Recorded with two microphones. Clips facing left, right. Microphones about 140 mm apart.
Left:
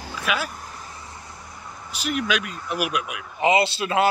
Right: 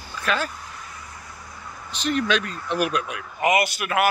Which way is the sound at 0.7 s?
30° left (ahead or behind).